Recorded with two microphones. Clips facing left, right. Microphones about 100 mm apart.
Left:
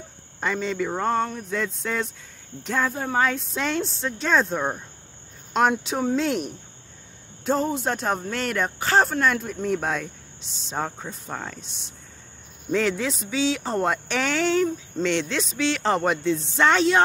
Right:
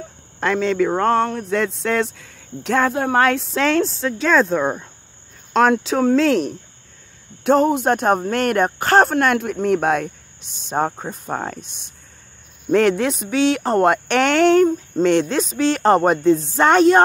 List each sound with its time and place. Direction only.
0.4 s speech: 90° right
5.7 s speech: 90° right
7.4 s speech: 65° right (ahead or behind)
15.0 s speech: 45° right (ahead or behind)